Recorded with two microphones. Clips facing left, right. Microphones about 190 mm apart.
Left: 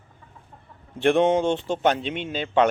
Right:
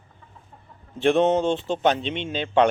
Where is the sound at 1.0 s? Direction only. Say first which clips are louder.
Even; 15° left (ahead or behind).